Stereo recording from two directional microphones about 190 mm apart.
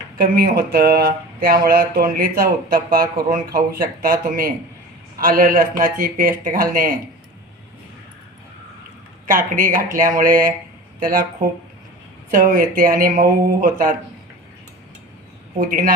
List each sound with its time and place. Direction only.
0.2 s speech: 50° right (ahead or behind)
9.2 s speech: 45° right (ahead or behind)
15.5 s speech: 45° right (ahead or behind)